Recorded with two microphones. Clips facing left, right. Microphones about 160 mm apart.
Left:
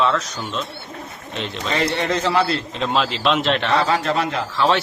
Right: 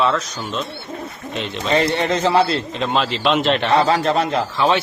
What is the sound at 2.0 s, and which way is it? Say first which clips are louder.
Speech: right 3 dB; 25° right (ahead or behind).